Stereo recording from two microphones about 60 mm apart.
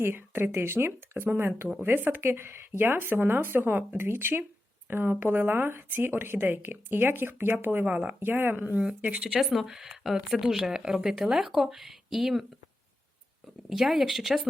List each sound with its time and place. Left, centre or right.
0.0 s speech: right
7.9 s speech: right
8.2 s speech: right
9.0 s speech: right
9.3 s speech: centre
13.7 s speech: centre